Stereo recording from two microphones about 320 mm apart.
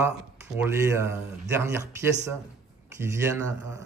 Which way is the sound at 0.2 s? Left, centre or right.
Centre.